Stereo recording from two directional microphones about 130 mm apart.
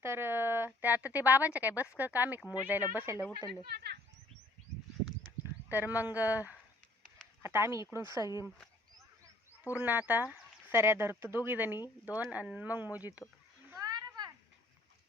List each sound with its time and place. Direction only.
0.0 s speech: 20° right (ahead or behind)
5.4 s speech: 15° right (ahead or behind)
8.2 s speech: 30° left (ahead or behind)
9.7 s speech: 10° right (ahead or behind)
13.7 s a sound: 30° right (ahead or behind)